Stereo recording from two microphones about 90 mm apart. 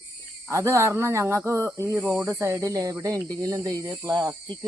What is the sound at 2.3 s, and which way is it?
Speech, 30° right (ahead or behind).